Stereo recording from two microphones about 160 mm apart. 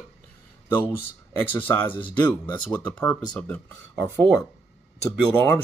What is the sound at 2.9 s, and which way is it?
Speech, 10° left (ahead or behind).